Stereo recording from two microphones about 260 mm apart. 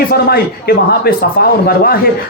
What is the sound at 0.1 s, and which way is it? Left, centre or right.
Speech, left.